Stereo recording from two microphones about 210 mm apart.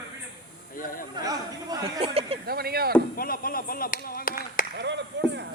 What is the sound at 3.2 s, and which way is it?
Speech, 45° left (ahead or behind).